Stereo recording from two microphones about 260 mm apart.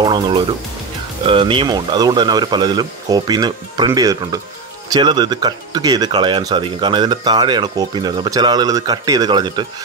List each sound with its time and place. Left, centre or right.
0.0 s speech: centre